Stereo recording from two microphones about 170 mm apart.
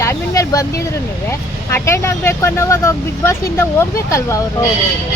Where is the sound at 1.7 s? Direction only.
15° left (ahead or behind).